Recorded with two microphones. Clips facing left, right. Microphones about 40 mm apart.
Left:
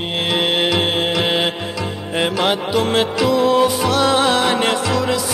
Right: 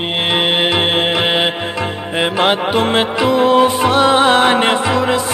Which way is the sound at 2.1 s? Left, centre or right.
Right.